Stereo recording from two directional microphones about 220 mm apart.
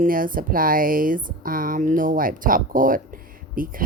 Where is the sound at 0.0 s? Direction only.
40° right (ahead or behind).